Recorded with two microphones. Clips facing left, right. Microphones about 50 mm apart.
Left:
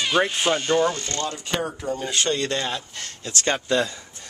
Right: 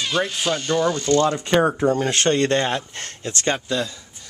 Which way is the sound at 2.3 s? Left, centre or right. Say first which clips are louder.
Right 7 dB; right.